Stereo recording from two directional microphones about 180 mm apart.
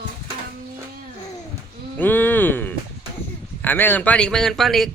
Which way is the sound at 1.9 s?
10° left (ahead or behind).